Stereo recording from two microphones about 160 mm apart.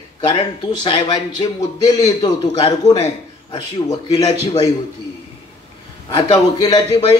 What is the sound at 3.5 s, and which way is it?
Speech, 25° left (ahead or behind).